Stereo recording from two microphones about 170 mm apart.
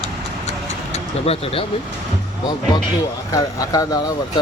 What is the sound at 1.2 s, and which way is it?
Speech, 35° left (ahead or behind).